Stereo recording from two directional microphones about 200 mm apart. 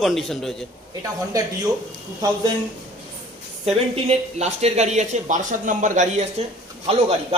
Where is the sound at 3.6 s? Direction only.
30° right (ahead or behind).